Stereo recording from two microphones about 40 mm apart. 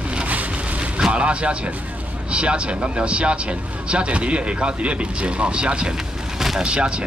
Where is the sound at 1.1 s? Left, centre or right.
Right.